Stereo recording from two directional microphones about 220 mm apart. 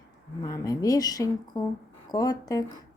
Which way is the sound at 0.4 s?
15° left (ahead or behind).